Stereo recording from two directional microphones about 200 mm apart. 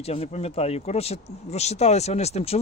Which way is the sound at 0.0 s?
30° left (ahead or behind).